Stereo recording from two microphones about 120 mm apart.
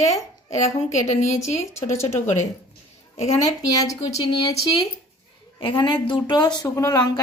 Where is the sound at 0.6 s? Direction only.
70° left (ahead or behind).